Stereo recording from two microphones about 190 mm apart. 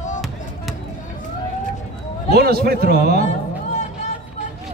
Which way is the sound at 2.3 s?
55° right (ahead or behind).